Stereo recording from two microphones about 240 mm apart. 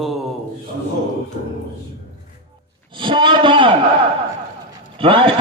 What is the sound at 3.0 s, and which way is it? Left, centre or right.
Speech, centre.